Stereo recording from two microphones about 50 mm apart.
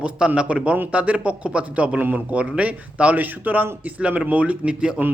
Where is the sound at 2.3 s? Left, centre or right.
Right.